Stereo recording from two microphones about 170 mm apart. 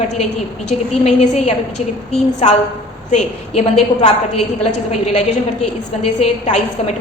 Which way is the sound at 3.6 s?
40° left (ahead or behind).